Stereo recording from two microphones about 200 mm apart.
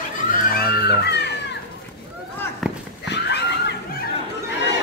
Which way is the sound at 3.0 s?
60° left (ahead or behind).